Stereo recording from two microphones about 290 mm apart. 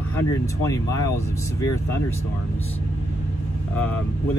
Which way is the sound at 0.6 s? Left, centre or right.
Centre.